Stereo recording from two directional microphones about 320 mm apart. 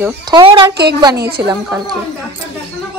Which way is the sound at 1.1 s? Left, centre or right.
Right.